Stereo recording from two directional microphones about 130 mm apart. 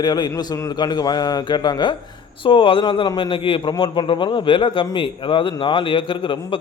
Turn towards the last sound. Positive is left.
turn(degrees=40)  # may be behind; listen again after turning